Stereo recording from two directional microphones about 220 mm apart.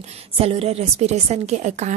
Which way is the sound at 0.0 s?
25° right (ahead or behind).